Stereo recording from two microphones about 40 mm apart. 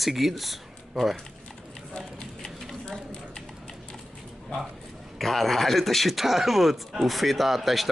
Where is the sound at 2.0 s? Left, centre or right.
Left.